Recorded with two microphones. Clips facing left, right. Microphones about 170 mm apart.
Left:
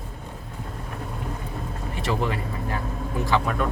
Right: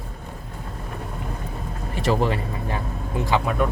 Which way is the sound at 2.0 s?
35° right (ahead or behind).